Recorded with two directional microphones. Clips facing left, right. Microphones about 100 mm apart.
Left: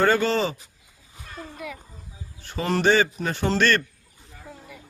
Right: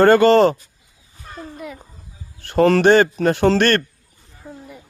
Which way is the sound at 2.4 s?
70° right (ahead or behind).